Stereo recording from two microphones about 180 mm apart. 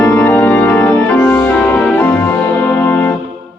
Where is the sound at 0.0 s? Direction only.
10° left (ahead or behind).